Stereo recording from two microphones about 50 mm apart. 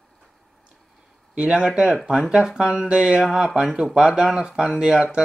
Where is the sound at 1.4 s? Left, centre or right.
Centre.